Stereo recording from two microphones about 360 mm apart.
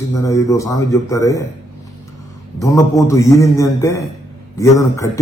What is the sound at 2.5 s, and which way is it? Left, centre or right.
Speech, centre.